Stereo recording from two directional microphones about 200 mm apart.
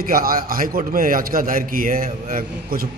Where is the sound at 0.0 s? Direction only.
45° right (ahead or behind).